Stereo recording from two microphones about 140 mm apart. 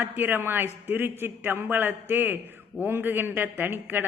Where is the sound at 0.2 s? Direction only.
15° right (ahead or behind).